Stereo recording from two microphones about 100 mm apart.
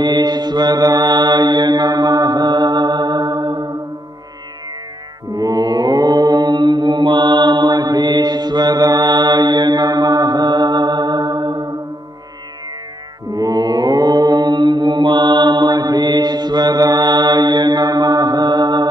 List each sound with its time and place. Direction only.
0.0 s mantra: 45° right (ahead or behind)
5.3 s mantra: 40° right (ahead or behind)
13.3 s mantra: 40° right (ahead or behind)